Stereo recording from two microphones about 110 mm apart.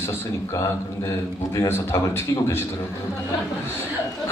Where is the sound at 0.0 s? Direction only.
30° left (ahead or behind).